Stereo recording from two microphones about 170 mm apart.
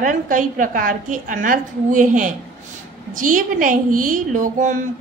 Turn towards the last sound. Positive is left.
turn(degrees=-50)  # may be behind; listen again after turning